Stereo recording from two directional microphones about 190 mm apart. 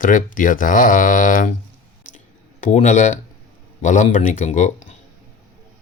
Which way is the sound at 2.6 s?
40° left (ahead or behind).